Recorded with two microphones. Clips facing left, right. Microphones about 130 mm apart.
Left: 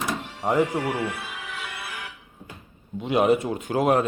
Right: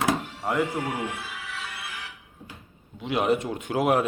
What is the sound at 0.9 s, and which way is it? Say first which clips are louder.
Speech: left 3 dB; 20° right (ahead or behind).